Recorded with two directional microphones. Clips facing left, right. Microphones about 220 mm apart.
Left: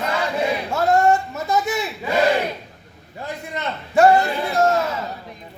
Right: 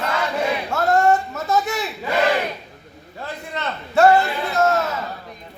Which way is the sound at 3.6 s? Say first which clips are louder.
Left 1 dB; 15° left (ahead or behind).